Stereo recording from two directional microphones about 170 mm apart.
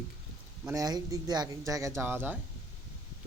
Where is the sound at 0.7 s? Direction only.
20° right (ahead or behind).